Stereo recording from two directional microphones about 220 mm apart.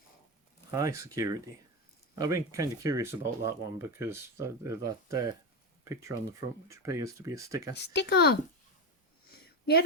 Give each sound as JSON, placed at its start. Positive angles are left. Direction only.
{"t": 0.7, "sound": "speech", "side_deg": -15}
{"t": 7.8, "sound": "speech", "side_deg": 50}
{"t": 9.3, "sound": "a sound", "side_deg": 45}